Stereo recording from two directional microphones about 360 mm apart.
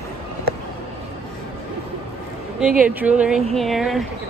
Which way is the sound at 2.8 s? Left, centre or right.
Centre.